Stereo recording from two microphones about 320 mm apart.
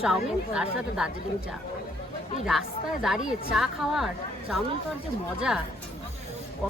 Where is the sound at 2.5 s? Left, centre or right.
Centre.